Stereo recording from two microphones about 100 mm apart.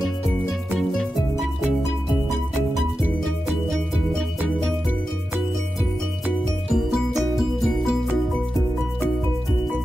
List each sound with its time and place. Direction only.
6.2 s music: 5° right (ahead or behind)